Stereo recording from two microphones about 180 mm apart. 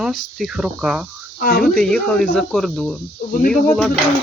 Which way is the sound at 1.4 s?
60° left (ahead or behind).